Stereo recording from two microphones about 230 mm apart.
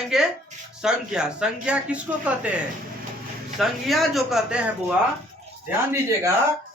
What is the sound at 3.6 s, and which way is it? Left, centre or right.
Speech, centre.